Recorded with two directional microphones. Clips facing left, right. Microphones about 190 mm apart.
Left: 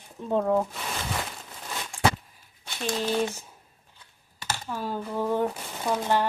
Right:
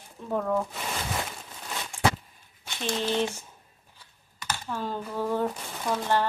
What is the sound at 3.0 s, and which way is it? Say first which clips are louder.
Speech: left 1 dB; 10° left (ahead or behind).